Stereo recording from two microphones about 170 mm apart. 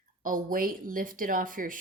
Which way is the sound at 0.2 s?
50° right (ahead or behind).